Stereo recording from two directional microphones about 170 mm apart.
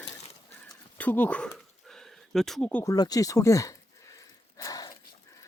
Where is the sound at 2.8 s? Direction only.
20° left (ahead or behind).